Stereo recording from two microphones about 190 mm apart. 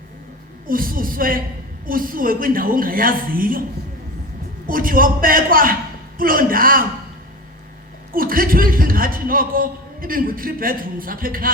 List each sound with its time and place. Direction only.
0.7 s a man's voice: 50° right (ahead or behind)
4.6 s a man's voice: 50° right (ahead or behind)
8.1 s a man's voice: 50° right (ahead or behind)